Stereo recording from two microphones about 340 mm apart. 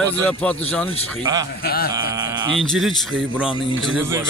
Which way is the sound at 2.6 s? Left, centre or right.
Centre.